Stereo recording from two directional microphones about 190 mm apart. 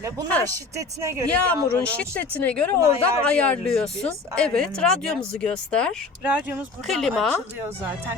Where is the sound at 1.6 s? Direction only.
10° left (ahead or behind).